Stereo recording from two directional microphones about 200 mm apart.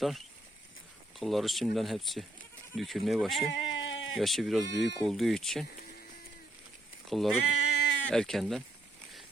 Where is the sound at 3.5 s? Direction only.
75° left (ahead or behind).